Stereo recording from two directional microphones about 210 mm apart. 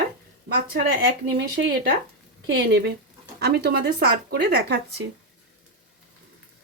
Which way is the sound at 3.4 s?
50° right (ahead or behind).